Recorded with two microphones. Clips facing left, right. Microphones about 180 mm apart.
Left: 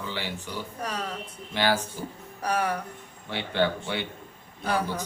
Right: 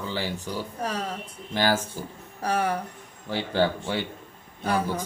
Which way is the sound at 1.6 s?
45° right (ahead or behind).